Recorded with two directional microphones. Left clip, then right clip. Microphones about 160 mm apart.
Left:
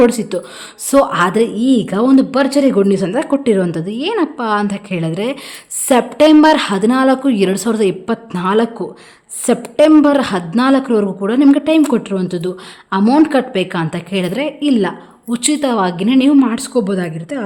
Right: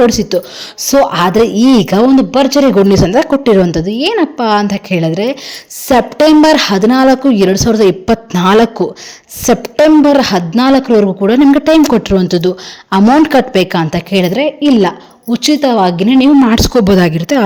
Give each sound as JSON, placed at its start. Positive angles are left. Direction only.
{"t": 0.0, "sound": "speech", "side_deg": -20}
{"t": 2.0, "sound": "speech", "side_deg": -15}
{"t": 16.5, "sound": "a woman's voice", "side_deg": -45}